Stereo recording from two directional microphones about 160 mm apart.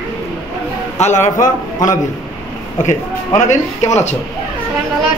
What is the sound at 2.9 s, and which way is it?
Speech, 50° left (ahead or behind).